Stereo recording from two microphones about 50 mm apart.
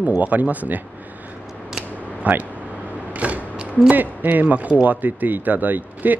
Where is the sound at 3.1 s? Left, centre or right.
Right.